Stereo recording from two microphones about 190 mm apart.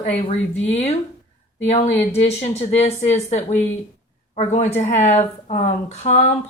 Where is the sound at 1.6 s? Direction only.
35° left (ahead or behind).